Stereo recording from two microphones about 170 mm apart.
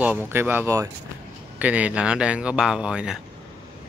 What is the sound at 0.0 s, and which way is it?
Speech, 10° right (ahead or behind).